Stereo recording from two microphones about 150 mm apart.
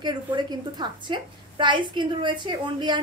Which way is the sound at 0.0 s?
30° right (ahead or behind).